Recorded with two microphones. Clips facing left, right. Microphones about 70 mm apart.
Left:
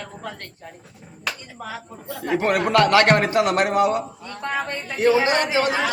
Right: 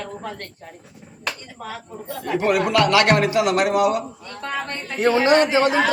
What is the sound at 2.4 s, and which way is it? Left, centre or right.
A man's voice, left.